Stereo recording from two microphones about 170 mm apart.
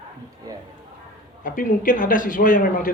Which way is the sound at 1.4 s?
55° left (ahead or behind).